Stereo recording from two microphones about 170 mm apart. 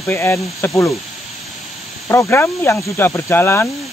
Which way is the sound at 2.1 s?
15° left (ahead or behind).